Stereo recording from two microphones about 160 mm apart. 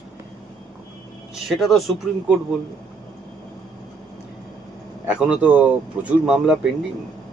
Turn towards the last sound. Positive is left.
turn(degrees=-5)  # may be behind; listen again after turning